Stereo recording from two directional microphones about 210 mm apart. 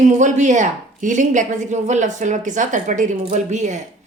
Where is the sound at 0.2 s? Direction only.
35° right (ahead or behind).